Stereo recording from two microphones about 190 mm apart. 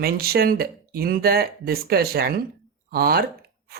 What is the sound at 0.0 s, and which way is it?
Speech, 55° right (ahead or behind).